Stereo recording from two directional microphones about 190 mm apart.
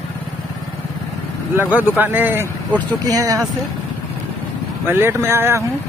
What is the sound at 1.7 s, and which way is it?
Speech, 10° right (ahead or behind).